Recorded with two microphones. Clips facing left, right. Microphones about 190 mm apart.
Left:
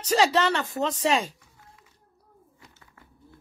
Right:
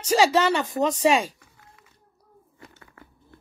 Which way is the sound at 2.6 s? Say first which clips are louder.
Right 9 dB; 70° right (ahead or behind).